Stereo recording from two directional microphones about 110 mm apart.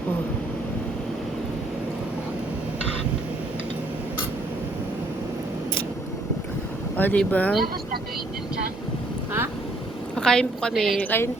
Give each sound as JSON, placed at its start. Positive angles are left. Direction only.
{"t": 6.9, "sound": "speech", "side_deg": 15}
{"t": 10.2, "sound": "a woman's voice", "side_deg": 5}
{"t": 11.0, "sound": "speech", "side_deg": 20}